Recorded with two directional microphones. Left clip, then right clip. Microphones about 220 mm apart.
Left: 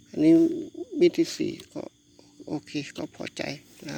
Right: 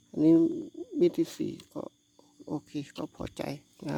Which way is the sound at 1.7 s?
20° right (ahead or behind).